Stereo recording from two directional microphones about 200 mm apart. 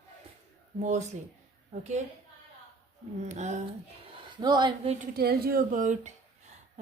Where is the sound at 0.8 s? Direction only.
35° right (ahead or behind).